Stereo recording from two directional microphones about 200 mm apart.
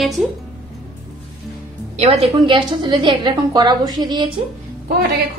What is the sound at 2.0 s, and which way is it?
A woman's voice, 30° right (ahead or behind).